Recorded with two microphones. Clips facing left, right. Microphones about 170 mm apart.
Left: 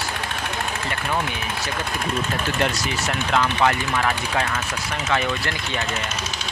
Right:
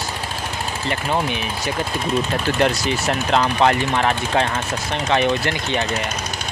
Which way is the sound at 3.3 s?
35° right (ahead or behind).